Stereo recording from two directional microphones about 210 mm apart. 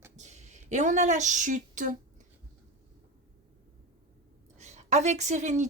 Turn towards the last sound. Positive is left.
turn(degrees=-35)  # may be behind; listen again after turning